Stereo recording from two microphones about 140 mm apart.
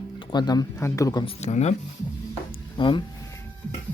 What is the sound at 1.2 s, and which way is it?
Speech, 50° left (ahead or behind).